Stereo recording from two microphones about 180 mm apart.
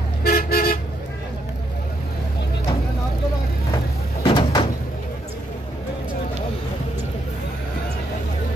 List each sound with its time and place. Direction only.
0.2 s toot: 60° left (ahead or behind)
4.2 s door: 30° left (ahead or behind)